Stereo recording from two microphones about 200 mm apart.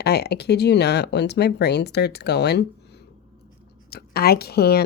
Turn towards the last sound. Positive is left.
turn(degrees=50)  # may be behind; listen again after turning